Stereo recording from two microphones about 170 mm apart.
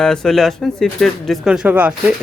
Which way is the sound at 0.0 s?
5° left (ahead or behind).